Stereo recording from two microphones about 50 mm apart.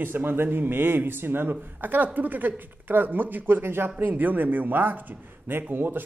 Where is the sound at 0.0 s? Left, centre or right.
Right.